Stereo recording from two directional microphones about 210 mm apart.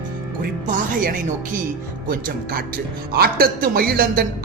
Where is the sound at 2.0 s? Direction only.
45° right (ahead or behind).